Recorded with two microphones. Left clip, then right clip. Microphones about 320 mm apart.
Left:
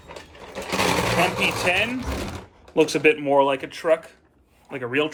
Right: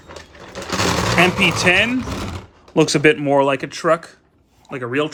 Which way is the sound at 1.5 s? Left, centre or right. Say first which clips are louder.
Right 6 dB; centre.